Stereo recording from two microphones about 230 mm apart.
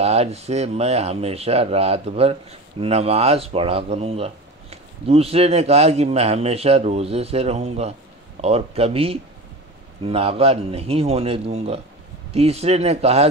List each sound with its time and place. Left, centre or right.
0.0 s speech: right